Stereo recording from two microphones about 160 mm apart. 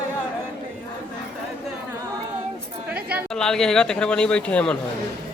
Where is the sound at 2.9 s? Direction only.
10° right (ahead or behind).